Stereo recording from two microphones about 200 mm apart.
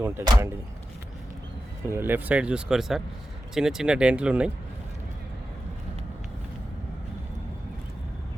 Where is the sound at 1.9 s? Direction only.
10° right (ahead or behind).